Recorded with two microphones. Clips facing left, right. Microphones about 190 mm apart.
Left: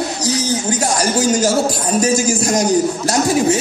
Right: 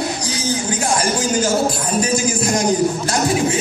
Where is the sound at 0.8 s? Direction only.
40° left (ahead or behind).